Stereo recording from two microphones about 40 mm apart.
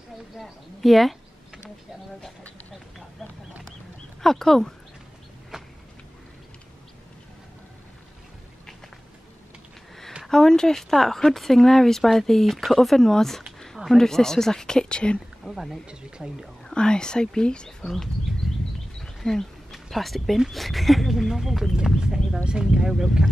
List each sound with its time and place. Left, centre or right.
0.4 s speech: centre
4.2 s speech: centre
5.5 s a sound: centre
10.2 s speech: centre
15.4 s speech: centre
16.6 s speech: centre
19.2 s a sound: centre
20.3 s speech: centre
21.1 s speech: centre
21.7 s speech: centre